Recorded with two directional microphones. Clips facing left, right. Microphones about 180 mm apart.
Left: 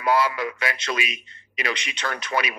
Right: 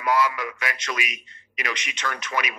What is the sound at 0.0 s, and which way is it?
A man's voice, 30° left (ahead or behind).